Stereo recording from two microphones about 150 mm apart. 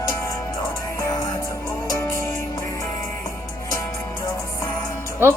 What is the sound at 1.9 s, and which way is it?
Music, 20° left (ahead or behind).